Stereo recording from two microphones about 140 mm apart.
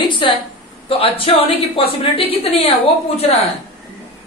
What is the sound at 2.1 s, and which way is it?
A woman's voice, 45° left (ahead or behind).